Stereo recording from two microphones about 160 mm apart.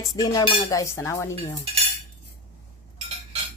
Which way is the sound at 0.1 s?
25° left (ahead or behind).